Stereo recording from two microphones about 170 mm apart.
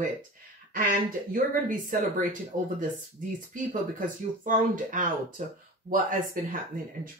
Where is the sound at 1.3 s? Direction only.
55° right (ahead or behind).